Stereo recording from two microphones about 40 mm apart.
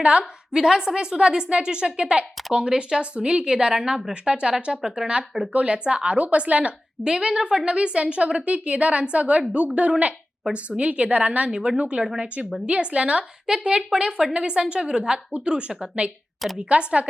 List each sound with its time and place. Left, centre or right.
0.0 s a woman's voice: right
0.5 s a woman's voice: centre
4.8 s speech: centre
5.5 s a woman's voice: right